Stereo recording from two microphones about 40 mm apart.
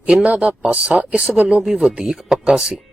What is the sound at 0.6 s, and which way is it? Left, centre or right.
Speech, right.